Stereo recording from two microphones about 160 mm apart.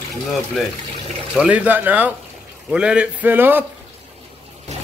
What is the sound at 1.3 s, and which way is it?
Speech, 5° right (ahead or behind).